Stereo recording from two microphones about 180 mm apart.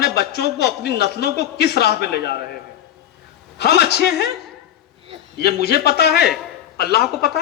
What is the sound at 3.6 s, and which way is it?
Speech, 65° left (ahead or behind).